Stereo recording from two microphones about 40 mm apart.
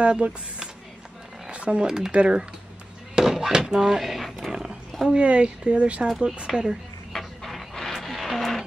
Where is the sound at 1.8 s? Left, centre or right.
Centre.